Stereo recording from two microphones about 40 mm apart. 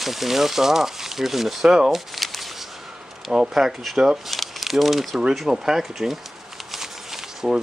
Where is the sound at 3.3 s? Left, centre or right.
Centre.